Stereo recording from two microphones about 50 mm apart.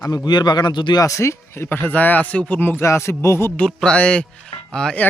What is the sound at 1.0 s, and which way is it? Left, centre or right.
Speech, left.